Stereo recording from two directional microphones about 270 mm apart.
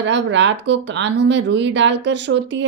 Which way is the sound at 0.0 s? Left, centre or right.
Right.